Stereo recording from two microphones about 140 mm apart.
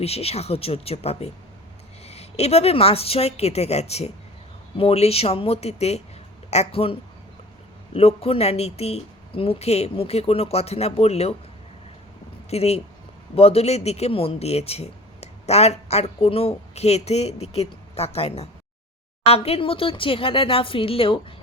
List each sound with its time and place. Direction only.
0.0 s speech: 45° left (ahead or behind)
7.9 s speech: 45° left (ahead or behind)
12.5 s speech: 45° left (ahead or behind)